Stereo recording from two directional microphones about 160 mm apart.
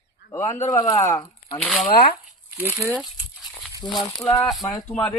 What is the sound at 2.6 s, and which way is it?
Speech, 15° right (ahead or behind).